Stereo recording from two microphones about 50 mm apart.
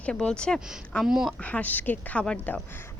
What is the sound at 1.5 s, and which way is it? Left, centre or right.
A woman's voice, left.